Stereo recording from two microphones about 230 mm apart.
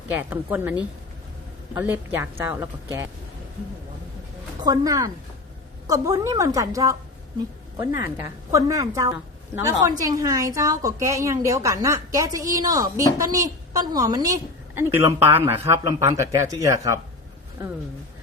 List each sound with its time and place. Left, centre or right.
0.1 s a woman's voice: centre
4.6 s a woman's voice: centre